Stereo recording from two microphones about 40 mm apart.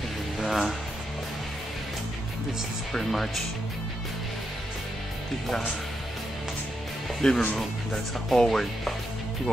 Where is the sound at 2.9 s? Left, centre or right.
Centre.